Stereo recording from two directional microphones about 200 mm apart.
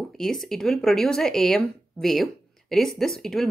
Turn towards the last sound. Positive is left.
turn(degrees=0)  # may be behind; listen again after turning